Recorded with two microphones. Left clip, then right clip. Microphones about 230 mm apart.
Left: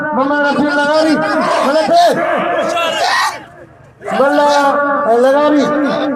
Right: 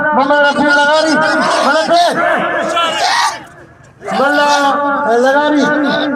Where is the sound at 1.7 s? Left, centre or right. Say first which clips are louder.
Even; right.